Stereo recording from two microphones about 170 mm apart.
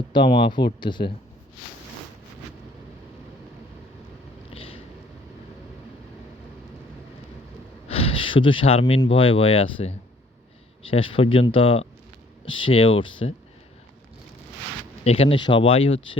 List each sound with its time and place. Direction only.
0.1 s speech: 30° left (ahead or behind)
4.5 s vehicle: 35° left (ahead or behind)
7.9 s a sound: 35° left (ahead or behind)
9.0 s speech: 30° left (ahead or behind)
15.0 s speech: 35° left (ahead or behind)